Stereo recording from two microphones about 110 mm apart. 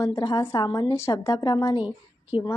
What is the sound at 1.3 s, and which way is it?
Speech, 45° left (ahead or behind).